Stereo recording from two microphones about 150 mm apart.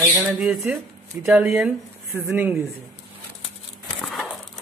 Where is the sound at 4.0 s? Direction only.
5° left (ahead or behind).